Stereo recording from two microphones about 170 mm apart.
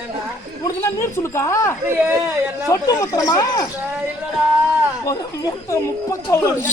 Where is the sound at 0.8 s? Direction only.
15° left (ahead or behind).